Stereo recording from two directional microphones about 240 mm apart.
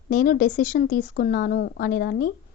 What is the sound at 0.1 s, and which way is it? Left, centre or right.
A woman's voice, left.